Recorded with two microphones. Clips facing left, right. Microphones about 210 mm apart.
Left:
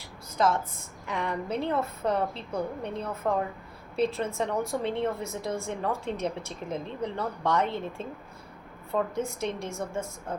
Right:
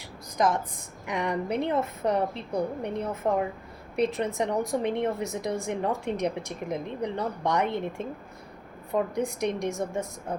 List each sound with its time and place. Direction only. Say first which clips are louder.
0.3 s a woman's voice: right 1 dB; 15° right (ahead or behind)